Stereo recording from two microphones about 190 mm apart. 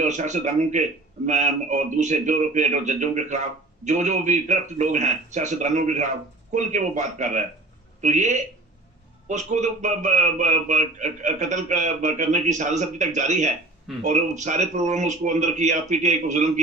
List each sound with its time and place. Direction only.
0.0 s a man's voice: 40° right (ahead or behind)